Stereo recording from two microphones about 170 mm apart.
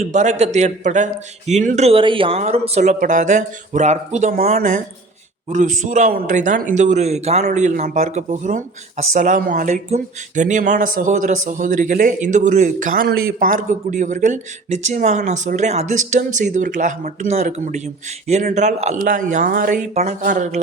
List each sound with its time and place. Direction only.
0.0 s speech: 45° right (ahead or behind)
13.1 s speech: 60° right (ahead or behind); by 20.6 s 45° right (ahead or behind)